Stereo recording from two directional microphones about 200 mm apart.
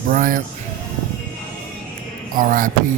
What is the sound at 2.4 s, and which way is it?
Speech, 45° right (ahead or behind).